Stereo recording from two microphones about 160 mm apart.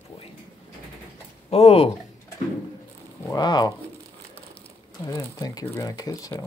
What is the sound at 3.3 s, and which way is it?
Speech, 25° left (ahead or behind).